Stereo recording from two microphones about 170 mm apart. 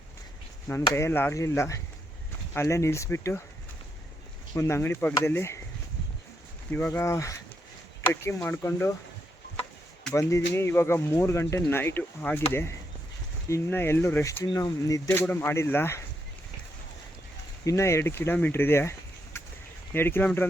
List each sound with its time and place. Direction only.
0.7 s speech: 15° left (ahead or behind)
4.5 s speech: 15° left (ahead or behind)
6.7 s speech: 10° left (ahead or behind)
10.2 s speech: 15° left (ahead or behind)
17.7 s speech: 15° left (ahead or behind)